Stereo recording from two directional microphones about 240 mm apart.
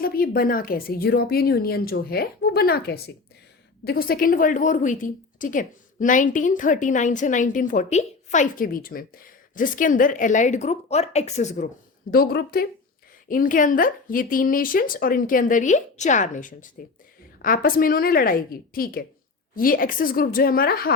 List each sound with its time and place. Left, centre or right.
0.0 s a woman's voice: left
12.1 s a woman's voice: left